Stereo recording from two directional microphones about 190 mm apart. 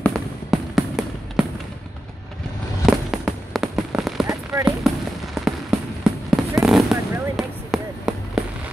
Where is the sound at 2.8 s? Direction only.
Centre (ahead or behind).